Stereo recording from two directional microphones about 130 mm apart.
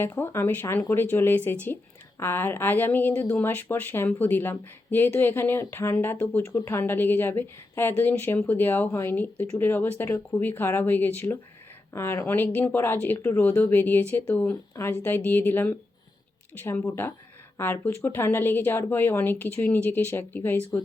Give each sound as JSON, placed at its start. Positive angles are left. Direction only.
{"t": 0.0, "sound": "speech", "side_deg": 15}